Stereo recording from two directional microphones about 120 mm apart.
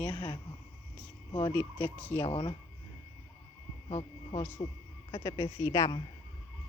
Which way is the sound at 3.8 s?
55° left (ahead or behind).